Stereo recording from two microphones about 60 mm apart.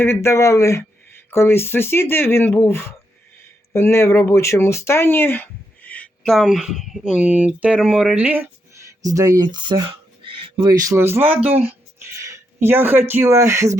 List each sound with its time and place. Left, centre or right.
0.0 s speech: left
1.3 s speech: left
6.2 s speech: centre
7.2 s speech: right
8.1 s speech: right
9.0 s speech: right
10.9 s speech: right
12.5 s speech: right